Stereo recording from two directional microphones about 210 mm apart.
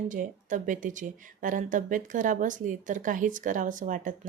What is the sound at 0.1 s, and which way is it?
Speech, 40° right (ahead or behind).